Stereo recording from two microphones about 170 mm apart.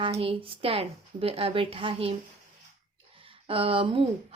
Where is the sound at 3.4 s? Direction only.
30° right (ahead or behind).